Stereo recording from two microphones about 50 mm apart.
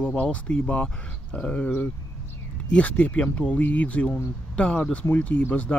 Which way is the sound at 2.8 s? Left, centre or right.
Left.